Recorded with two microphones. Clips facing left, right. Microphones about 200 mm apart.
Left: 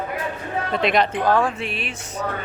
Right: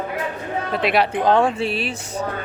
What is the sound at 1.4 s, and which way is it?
Speech, 30° right (ahead or behind).